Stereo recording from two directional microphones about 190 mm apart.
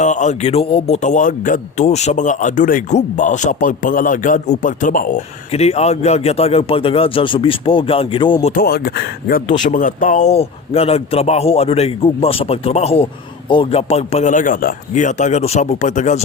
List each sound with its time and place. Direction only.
0.0 s speech: 40° left (ahead or behind)
5.5 s speech: 35° left (ahead or behind)
8.5 s speech: 55° left (ahead or behind); by 16.2 s 40° left (ahead or behind)